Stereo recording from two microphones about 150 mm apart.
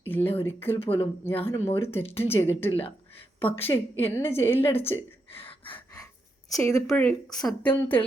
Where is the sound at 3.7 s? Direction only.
25° left (ahead or behind).